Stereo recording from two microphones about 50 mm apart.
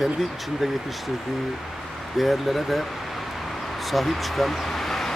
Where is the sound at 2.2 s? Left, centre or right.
Centre.